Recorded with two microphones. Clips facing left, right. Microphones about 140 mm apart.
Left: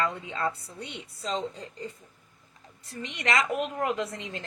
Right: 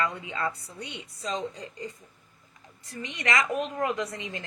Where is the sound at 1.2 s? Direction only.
25° left (ahead or behind).